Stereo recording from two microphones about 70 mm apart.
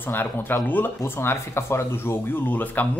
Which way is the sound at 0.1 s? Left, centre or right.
Left.